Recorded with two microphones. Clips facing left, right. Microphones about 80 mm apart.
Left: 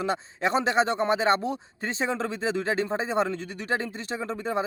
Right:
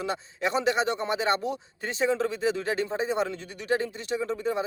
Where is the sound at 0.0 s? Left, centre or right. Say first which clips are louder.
Left 2 dB; left.